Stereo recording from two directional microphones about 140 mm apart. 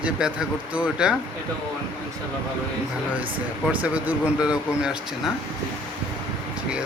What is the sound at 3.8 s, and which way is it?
Speech, 10° right (ahead or behind).